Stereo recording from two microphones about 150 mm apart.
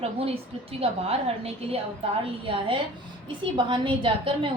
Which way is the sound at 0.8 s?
40° right (ahead or behind).